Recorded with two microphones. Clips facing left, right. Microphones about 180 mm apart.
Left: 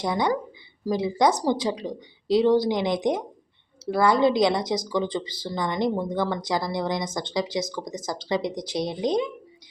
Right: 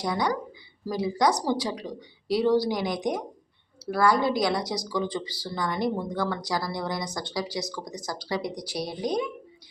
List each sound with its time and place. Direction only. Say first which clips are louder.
0.0 s speech: left 3 dB; 25° left (ahead or behind)